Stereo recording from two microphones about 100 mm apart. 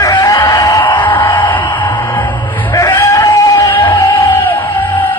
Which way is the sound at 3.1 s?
40° left (ahead or behind).